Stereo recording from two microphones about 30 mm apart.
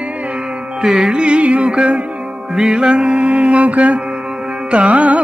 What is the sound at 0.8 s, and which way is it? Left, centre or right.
Carnatic music, right.